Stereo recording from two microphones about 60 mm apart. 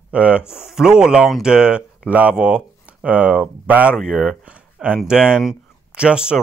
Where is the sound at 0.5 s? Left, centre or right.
Centre.